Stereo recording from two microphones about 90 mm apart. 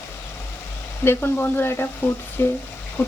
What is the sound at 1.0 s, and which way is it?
Speech, 25° left (ahead or behind).